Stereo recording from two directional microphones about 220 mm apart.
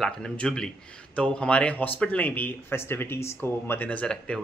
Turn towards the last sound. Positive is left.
turn(degrees=5)  # may be behind; listen again after turning